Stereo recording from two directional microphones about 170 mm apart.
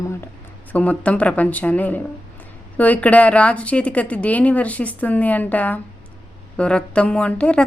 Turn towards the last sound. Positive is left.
turn(degrees=5)  # may be behind; listen again after turning